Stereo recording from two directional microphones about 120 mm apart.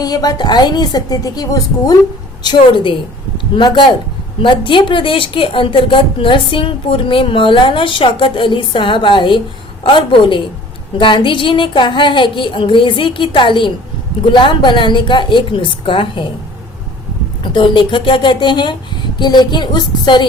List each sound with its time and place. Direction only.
0.0 s a woman's voice: 30° left (ahead or behind)
17.4 s a woman's voice: 40° left (ahead or behind)